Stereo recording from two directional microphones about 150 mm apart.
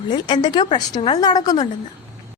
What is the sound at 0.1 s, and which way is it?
A woman's voice, 30° left (ahead or behind).